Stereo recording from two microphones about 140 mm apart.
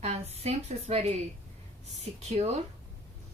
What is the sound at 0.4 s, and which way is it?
A woman's voice, 50° right (ahead or behind).